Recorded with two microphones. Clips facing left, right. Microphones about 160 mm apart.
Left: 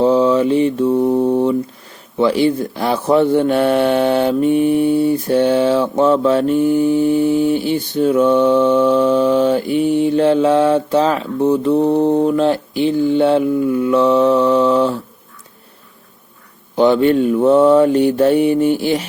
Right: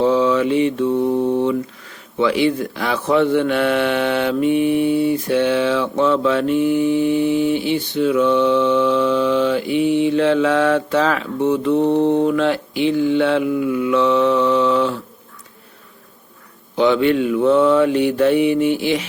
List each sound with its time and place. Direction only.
0.0 s mantra: 35° left (ahead or behind)
1.1 s a man's voice: 40° left (ahead or behind)
16.7 s a man's voice: 40° left (ahead or behind)